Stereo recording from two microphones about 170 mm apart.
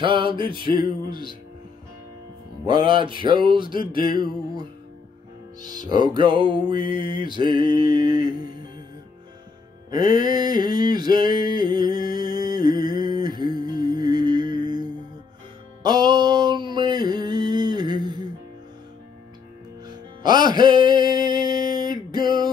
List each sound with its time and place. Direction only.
0.0 s music: 30° right (ahead or behind)
2.6 s music: 25° right (ahead or behind)
5.6 s music: 25° right (ahead or behind)
9.8 s music: 25° right (ahead or behind)
20.2 s a sound: 25° right (ahead or behind)